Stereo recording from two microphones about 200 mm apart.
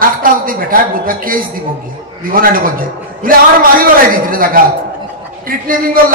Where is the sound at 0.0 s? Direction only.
45° right (ahead or behind).